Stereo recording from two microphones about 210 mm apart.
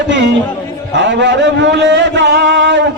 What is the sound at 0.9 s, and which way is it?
A man's voice, 60° right (ahead or behind).